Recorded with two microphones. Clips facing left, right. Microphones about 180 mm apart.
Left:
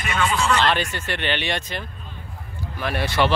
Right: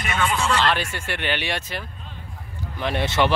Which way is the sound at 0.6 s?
5° right (ahead or behind).